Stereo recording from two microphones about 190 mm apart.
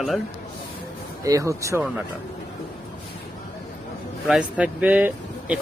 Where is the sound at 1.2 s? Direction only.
15° right (ahead or behind).